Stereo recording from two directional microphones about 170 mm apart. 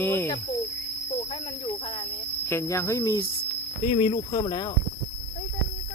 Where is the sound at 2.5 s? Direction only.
15° left (ahead or behind).